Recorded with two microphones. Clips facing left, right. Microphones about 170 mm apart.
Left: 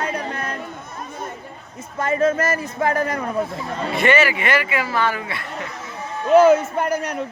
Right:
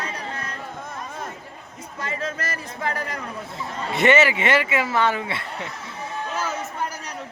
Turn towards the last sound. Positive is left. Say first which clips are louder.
# left 9 dB
turn(degrees=55)  # may be behind; listen again after turning